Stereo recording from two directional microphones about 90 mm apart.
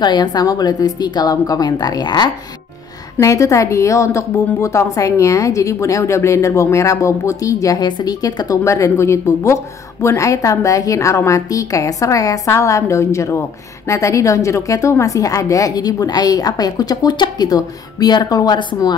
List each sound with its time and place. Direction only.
0.0 s a woman's voice: 50° left (ahead or behind)
3.2 s a woman's voice: 35° left (ahead or behind)
8.6 s a woman's voice: 35° left (ahead or behind); by 18.8 s 55° left (ahead or behind)